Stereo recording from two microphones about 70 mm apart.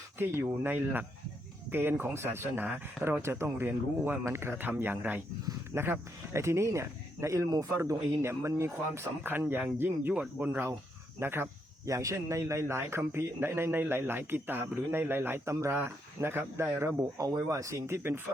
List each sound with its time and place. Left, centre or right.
0.3 s a man's voice: right
9.2 s a man's voice: right
11.9 s a man's voice: right
17.0 s speech: right